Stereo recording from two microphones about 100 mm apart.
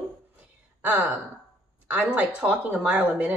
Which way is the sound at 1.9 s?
15° right (ahead or behind).